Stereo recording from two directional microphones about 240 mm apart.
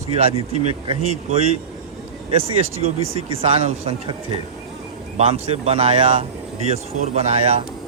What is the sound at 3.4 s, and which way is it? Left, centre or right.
Speech, right.